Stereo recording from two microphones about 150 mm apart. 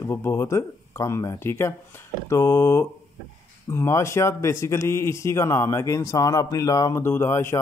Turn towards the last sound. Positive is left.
turn(degrees=20)  # may be behind; listen again after turning